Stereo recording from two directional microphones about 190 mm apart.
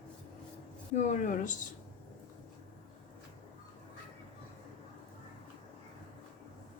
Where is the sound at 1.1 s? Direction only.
40° left (ahead or behind).